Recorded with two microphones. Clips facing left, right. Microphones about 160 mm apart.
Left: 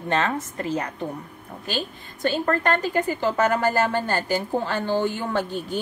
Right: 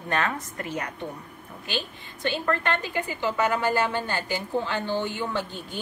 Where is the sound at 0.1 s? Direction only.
30° left (ahead or behind).